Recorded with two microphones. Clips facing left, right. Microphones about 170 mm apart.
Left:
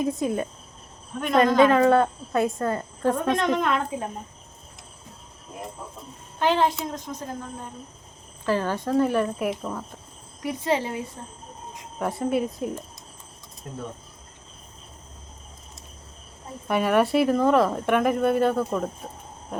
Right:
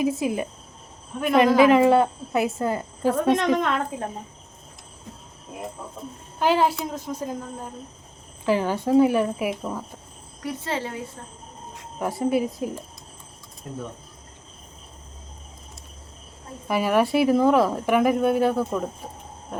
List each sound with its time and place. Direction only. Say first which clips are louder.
0.0 s speech: right 1 dB; 5° right (ahead or behind)
6.4 s speech: right 1 dB; 5° right (ahead or behind)
10.4 s speech: left 4 dB; 15° left (ahead or behind)
11.9 s speech: right 2 dB; centre (ahead or behind)
16.6 s speech: even; centre (ahead or behind)